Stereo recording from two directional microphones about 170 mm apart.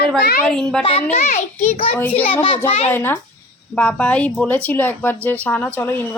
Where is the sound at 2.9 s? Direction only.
10° left (ahead or behind).